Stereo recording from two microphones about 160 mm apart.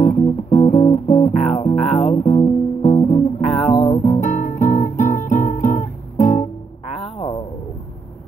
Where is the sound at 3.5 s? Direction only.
Centre (ahead or behind).